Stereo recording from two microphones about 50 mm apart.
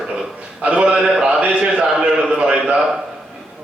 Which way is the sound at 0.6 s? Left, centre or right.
Right.